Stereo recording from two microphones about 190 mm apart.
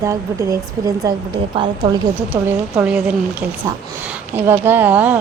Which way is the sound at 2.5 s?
10° right (ahead or behind).